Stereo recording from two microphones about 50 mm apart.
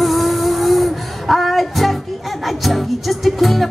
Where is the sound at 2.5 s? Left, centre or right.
Centre.